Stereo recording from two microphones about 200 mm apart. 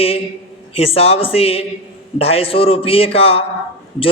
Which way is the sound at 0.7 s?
30° left (ahead or behind).